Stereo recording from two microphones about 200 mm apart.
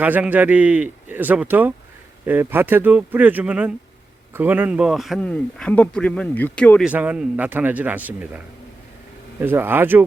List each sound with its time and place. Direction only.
0.0 s speech: 10° right (ahead or behind)
6.8 s speech: 10° right (ahead or behind)
9.4 s speech: 10° right (ahead or behind)